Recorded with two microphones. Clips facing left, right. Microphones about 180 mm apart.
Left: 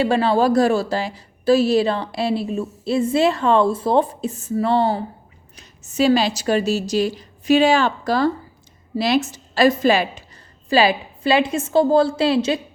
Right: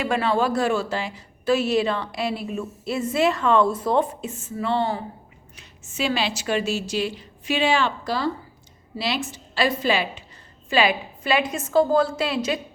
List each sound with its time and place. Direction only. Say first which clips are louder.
0.0 s a woman's voice: left 5 dB; 30° left (ahead or behind)